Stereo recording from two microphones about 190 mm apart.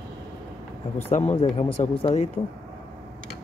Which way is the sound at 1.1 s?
40° left (ahead or behind).